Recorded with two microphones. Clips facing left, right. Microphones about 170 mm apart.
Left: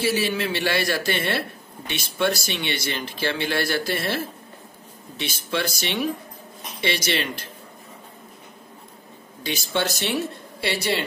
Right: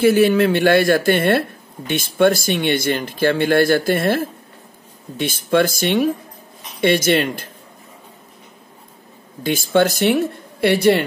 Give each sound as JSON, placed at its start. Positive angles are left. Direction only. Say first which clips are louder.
{"t": 0.0, "sound": "speech", "louder": "right 10 dB", "side_deg": -50}
{"t": 9.4, "sound": "speech", "louder": "right 10 dB", "side_deg": -50}